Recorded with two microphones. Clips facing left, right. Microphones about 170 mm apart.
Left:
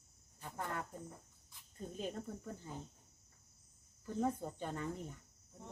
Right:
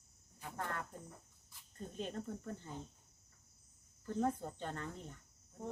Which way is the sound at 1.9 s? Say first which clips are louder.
Even; 5° left (ahead or behind).